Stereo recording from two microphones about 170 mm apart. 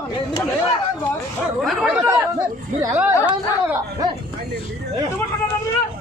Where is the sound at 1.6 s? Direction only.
Centre (ahead or behind).